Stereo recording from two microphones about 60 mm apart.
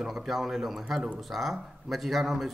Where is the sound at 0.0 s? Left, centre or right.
Centre.